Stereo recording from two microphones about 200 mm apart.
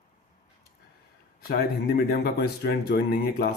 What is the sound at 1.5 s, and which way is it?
Speech, 50° left (ahead or behind).